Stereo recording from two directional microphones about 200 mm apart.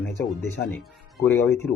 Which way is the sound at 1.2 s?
10° left (ahead or behind).